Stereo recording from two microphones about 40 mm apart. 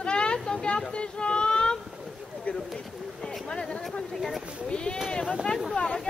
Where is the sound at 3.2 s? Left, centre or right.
Centre.